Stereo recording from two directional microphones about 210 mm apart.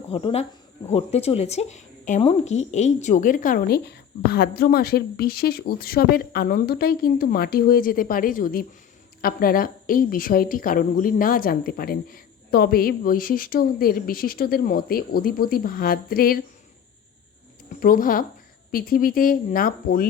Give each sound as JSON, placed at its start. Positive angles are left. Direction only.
{"t": 0.1, "sound": "a woman's voice", "side_deg": 25}
{"t": 17.7, "sound": "a woman's voice", "side_deg": 40}